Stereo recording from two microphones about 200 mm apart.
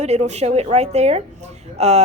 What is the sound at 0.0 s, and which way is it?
A woman's voice, 35° right (ahead or behind).